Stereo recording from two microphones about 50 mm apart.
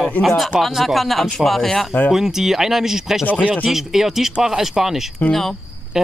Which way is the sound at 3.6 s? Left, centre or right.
Centre.